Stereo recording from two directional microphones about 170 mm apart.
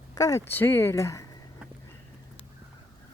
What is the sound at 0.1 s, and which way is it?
Speech, 20° left (ahead or behind).